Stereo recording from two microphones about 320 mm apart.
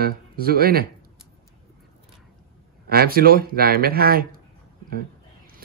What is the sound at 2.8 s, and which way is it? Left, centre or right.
A man's voice, right.